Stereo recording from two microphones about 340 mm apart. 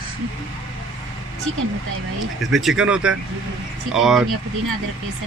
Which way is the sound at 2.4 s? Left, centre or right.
Centre.